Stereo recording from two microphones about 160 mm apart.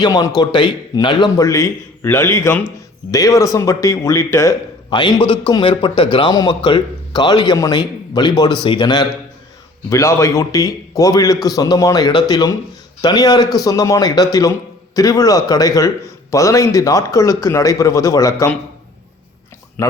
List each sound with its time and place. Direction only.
0.0 s speech: 25° left (ahead or behind)
4.9 s a man's voice: 30° left (ahead or behind)
19.8 s speech: 20° left (ahead or behind)